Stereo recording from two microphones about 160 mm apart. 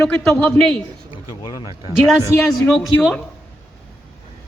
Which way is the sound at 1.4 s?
25° left (ahead or behind).